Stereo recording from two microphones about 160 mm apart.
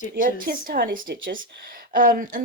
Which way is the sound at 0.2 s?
60° right (ahead or behind).